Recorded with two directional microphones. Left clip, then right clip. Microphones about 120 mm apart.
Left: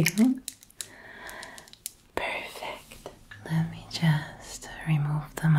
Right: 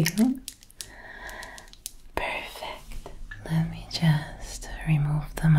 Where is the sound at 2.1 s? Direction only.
10° right (ahead or behind).